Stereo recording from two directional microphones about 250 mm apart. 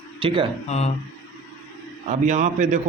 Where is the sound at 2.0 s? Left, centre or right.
Right.